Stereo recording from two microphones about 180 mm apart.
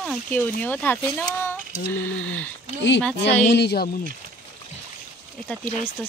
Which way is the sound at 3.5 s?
65° left (ahead or behind).